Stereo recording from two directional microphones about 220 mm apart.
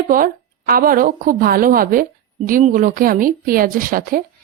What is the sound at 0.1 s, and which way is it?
Speech, 40° right (ahead or behind).